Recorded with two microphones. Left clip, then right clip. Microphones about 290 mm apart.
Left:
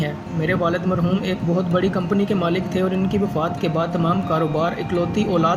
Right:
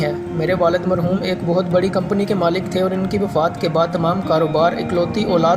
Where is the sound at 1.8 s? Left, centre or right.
Centre.